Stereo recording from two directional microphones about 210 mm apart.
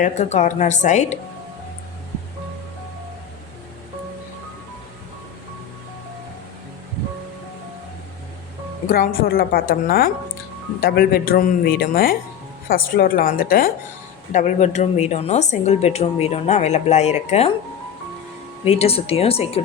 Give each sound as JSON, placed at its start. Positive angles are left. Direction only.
{"t": 0.0, "sound": "speech", "side_deg": 35}
{"t": 8.9, "sound": "speech", "side_deg": 45}
{"t": 18.8, "sound": "speech", "side_deg": 30}